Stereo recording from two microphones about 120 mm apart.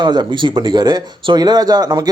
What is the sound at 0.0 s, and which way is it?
Speech, 40° right (ahead or behind).